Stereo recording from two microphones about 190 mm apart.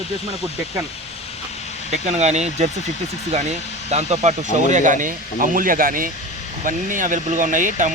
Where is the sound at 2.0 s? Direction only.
35° right (ahead or behind).